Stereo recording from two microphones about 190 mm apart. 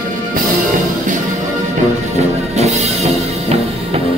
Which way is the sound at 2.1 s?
35° right (ahead or behind).